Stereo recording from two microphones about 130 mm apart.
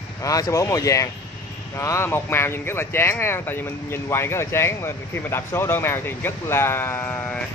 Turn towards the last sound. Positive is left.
turn(degrees=15)  # may be behind; listen again after turning